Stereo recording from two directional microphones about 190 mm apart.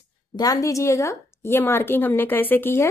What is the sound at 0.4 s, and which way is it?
A woman's voice, 20° left (ahead or behind).